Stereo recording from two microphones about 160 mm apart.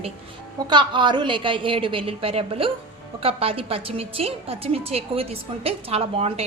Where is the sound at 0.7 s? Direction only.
30° right (ahead or behind).